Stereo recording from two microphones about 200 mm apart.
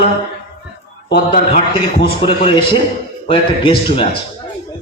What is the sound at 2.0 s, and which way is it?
A man's voice, 25° left (ahead or behind).